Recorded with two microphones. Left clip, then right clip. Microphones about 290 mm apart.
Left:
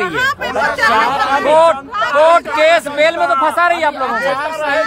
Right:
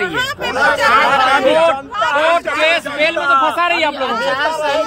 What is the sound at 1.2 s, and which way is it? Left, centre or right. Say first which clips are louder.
Speech: left 1 dB; left.